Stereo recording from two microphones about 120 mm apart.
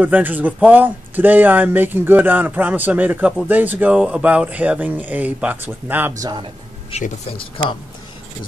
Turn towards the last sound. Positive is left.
turn(degrees=45)  # may be behind; listen again after turning